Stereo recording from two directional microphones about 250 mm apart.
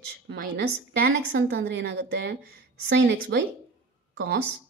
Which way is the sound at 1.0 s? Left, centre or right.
Right.